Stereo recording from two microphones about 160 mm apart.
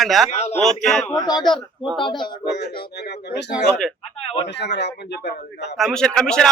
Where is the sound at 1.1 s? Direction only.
25° left (ahead or behind).